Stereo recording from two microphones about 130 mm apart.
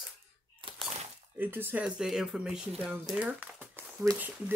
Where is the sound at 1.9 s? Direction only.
5° right (ahead or behind).